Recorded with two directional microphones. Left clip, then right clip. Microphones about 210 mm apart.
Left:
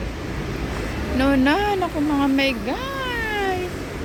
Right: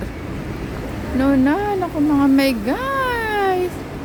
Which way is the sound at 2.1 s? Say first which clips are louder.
Right 4 dB; 35° right (ahead or behind).